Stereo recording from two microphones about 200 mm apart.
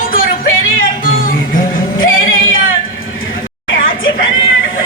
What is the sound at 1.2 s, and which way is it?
Music, 45° left (ahead or behind).